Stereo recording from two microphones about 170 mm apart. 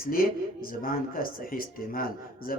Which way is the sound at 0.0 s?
60° left (ahead or behind).